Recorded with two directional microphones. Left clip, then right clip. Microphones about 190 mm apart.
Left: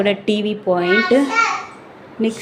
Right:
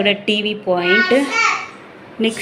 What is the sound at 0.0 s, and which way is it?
Speech, 15° left (ahead or behind).